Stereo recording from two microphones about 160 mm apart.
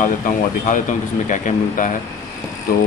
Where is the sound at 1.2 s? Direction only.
50° left (ahead or behind).